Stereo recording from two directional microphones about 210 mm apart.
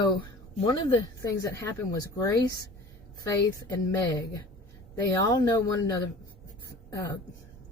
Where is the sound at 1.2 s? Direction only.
15° left (ahead or behind).